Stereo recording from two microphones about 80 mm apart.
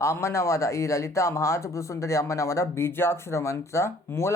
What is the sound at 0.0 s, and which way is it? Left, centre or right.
Speech, left.